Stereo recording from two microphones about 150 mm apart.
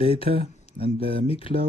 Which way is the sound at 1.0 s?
40° left (ahead or behind).